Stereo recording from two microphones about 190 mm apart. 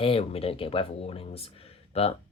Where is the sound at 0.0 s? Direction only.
30° left (ahead or behind).